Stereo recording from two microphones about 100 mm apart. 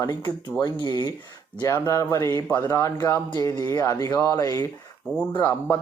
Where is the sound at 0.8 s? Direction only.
45° left (ahead or behind).